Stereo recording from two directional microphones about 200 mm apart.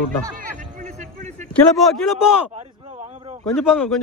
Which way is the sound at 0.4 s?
40° right (ahead or behind).